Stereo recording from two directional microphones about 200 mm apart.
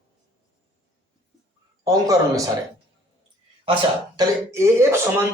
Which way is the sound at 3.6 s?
20° right (ahead or behind).